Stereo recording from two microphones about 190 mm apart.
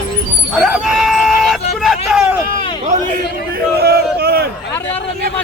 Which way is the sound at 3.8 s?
55° right (ahead or behind).